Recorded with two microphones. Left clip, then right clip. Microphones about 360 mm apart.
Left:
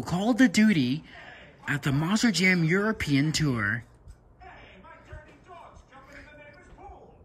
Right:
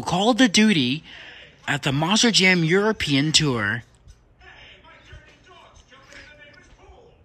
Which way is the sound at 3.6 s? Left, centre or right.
Left.